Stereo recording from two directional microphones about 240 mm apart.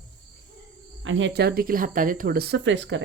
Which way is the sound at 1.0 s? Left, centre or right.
Right.